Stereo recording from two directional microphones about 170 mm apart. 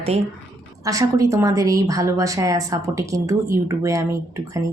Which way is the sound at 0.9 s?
20° right (ahead or behind).